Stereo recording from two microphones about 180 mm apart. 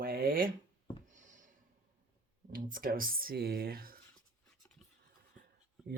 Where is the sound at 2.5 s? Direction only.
50° right (ahead or behind).